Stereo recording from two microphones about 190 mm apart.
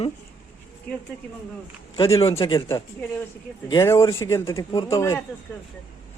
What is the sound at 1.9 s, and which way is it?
Speech, 25° left (ahead or behind).